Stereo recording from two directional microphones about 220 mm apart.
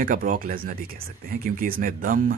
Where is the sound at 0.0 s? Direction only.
40° right (ahead or behind).